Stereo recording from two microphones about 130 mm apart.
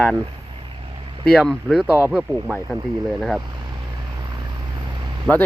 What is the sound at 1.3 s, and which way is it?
Speech, centre (ahead or behind).